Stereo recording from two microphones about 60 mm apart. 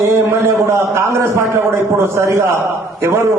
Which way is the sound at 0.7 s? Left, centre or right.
Right.